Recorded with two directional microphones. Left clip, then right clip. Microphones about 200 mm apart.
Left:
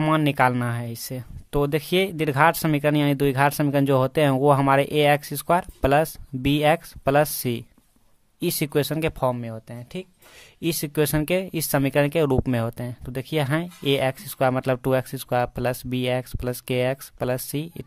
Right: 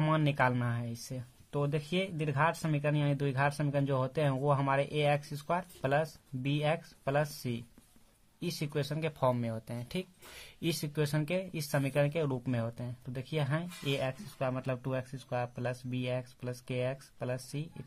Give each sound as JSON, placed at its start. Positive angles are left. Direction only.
{"t": 0.0, "sound": "speech", "side_deg": 35}
{"t": 9.3, "sound": "speech", "side_deg": 20}
{"t": 10.6, "sound": "speech", "side_deg": 30}